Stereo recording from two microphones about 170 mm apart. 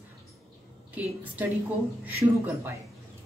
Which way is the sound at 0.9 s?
10° right (ahead or behind).